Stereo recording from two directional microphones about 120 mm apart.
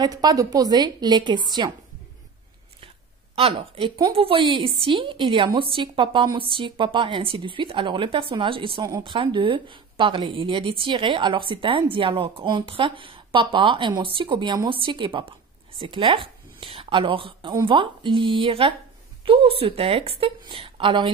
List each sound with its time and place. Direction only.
0.0 s a woman's voice: 35° right (ahead or behind)
3.3 s a woman's voice: 50° right (ahead or behind)